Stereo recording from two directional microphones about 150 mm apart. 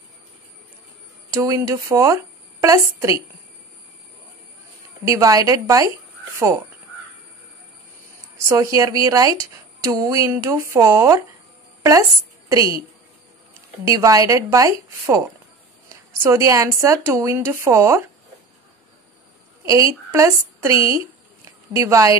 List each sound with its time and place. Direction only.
1.3 s a woman's voice: 20° right (ahead or behind)
5.0 s a woman's voice: 20° right (ahead or behind)
8.5 s a woman's voice: 20° right (ahead or behind)
12.4 s a woman's voice: 20° right (ahead or behind)
13.8 s a woman's voice: 25° right (ahead or behind)
19.6 s a woman's voice: 20° right (ahead or behind)